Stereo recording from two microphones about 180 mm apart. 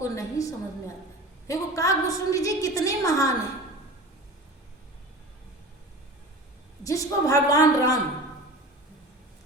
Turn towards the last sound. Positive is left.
turn(degrees=20)  # may be behind; listen again after turning